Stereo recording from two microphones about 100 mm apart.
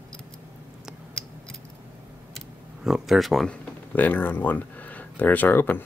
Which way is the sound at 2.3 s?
5° right (ahead or behind).